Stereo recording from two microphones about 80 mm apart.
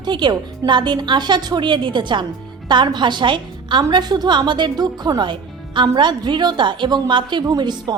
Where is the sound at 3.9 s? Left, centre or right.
Right.